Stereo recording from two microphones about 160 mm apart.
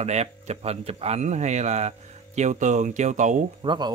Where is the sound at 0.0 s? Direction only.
45° right (ahead or behind).